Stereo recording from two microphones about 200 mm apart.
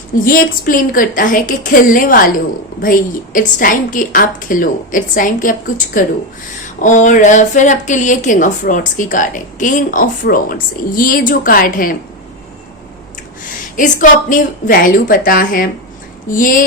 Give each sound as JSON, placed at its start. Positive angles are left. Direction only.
{"t": 0.3, "sound": "a woman's voice", "side_deg": 45}
{"t": 13.7, "sound": "a woman's voice", "side_deg": 40}